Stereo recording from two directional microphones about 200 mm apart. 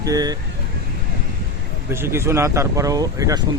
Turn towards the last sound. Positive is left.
turn(degrees=-15)  # may be behind; listen again after turning